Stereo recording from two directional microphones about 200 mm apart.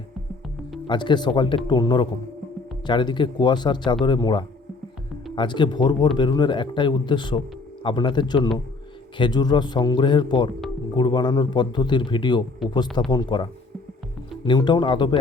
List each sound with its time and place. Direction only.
0.9 s a man's voice: 25° left (ahead or behind)
12.6 s speech: centre (ahead or behind)
13.1 s a man's voice: 20° left (ahead or behind)